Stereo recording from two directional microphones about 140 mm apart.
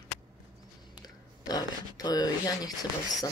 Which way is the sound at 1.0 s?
30° left (ahead or behind).